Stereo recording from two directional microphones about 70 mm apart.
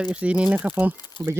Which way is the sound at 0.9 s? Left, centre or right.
Left.